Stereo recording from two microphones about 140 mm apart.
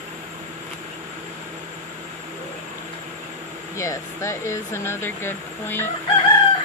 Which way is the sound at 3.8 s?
20° left (ahead or behind).